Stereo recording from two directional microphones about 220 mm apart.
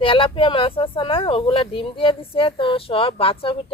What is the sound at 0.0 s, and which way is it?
Speech, 25° left (ahead or behind).